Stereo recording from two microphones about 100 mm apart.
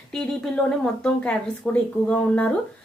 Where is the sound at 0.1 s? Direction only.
5° left (ahead or behind).